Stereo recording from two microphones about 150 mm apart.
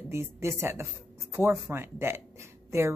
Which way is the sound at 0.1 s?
15° right (ahead or behind).